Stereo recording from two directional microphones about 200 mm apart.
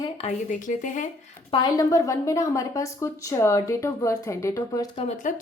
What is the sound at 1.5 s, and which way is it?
A woman's voice, 20° left (ahead or behind).